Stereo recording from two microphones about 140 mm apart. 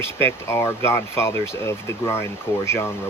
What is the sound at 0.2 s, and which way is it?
Speech, 20° left (ahead or behind).